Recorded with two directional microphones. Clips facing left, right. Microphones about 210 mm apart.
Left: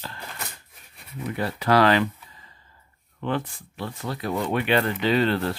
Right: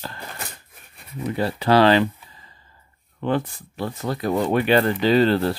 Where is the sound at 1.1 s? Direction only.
30° right (ahead or behind).